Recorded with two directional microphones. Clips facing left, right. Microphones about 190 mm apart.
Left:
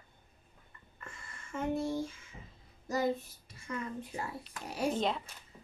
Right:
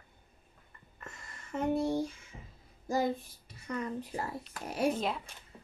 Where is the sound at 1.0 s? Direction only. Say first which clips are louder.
Right 2 dB; 40° right (ahead or behind).